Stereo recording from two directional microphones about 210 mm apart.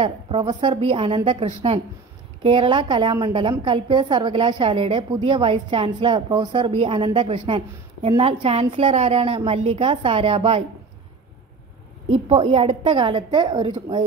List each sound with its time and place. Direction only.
0.0 s a woman's voice: 25° right (ahead or behind)
12.1 s a woman's voice: 30° right (ahead or behind)